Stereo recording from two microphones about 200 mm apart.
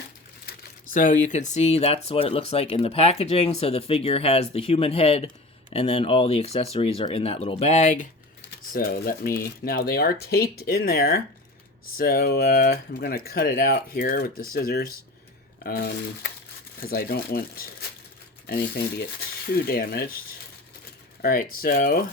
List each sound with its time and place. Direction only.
0.9 s speech: 40° left (ahead or behind)
8.7 s speech: 45° left (ahead or behind)
21.2 s speech: 45° left (ahead or behind)